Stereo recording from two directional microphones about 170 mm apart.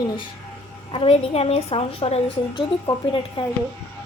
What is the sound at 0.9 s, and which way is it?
A woman's voice, 35° left (ahead or behind).